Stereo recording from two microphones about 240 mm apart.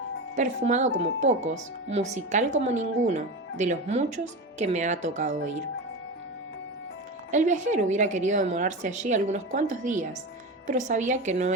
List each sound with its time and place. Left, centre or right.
0.3 s speech: right
7.3 s a woman's voice: right